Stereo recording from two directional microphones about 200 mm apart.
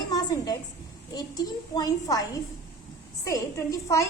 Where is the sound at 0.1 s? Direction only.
20° left (ahead or behind).